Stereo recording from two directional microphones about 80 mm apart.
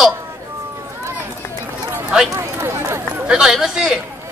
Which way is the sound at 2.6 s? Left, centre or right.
Right.